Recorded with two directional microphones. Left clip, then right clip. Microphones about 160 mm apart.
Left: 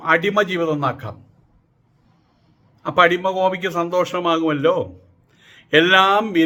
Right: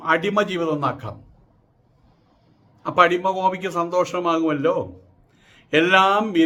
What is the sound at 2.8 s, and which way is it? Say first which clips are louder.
A man's voice: left 2 dB; 10° left (ahead or behind).